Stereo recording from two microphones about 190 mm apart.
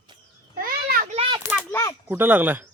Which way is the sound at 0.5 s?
50° right (ahead or behind).